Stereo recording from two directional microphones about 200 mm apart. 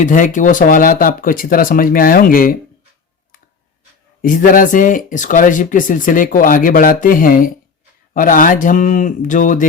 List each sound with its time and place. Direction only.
0.0 s speech: 40° left (ahead or behind)
4.2 s speech: 45° left (ahead or behind)